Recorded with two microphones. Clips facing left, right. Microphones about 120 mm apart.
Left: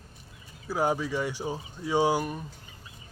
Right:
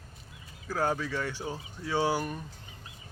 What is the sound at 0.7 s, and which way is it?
Speech, 15° left (ahead or behind).